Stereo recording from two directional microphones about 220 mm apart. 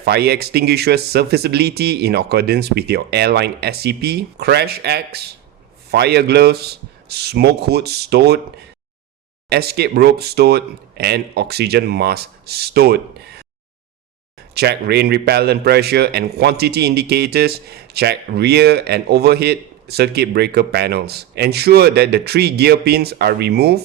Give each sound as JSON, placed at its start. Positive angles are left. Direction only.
{"t": 0.0, "sound": "a man's voice", "side_deg": -45}
{"t": 9.5, "sound": "a man's voice", "side_deg": -45}
{"t": 14.5, "sound": "a man's voice", "side_deg": -50}